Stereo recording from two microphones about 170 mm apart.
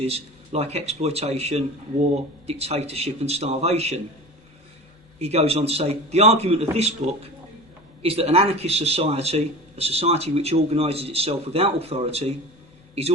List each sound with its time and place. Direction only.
0.0 s speech: 35° right (ahead or behind)
5.2 s speech: 35° right (ahead or behind)